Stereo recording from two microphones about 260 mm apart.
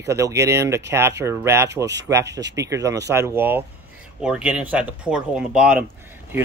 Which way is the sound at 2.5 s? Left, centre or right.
Centre.